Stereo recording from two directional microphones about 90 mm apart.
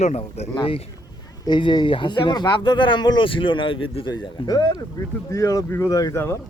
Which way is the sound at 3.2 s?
70° left (ahead or behind).